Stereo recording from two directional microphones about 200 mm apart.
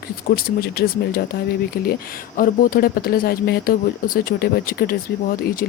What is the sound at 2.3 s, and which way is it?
Speech, 45° left (ahead or behind).